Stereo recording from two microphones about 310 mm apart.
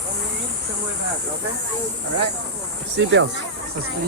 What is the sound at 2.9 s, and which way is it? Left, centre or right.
Speech, right.